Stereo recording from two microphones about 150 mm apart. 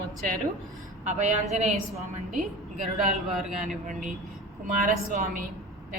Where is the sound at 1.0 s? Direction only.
50° right (ahead or behind).